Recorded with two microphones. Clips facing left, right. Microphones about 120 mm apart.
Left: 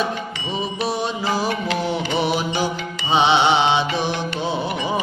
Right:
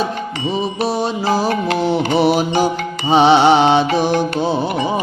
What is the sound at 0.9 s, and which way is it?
Music, 35° right (ahead or behind).